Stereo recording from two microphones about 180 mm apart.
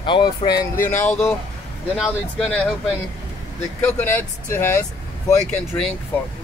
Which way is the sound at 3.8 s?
10° left (ahead or behind).